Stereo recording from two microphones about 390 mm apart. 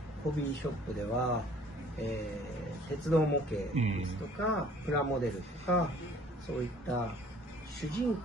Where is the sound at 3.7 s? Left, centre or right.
Centre.